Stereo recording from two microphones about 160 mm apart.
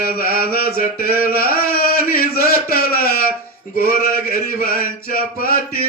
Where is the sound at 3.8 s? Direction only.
65° left (ahead or behind).